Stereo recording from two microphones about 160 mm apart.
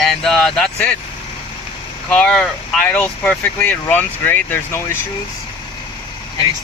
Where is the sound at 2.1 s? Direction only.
5° left (ahead or behind).